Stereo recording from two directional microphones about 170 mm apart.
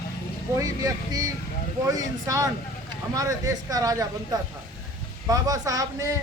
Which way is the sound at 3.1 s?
20° right (ahead or behind).